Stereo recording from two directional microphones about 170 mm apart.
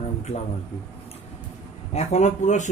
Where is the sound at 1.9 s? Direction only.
40° left (ahead or behind).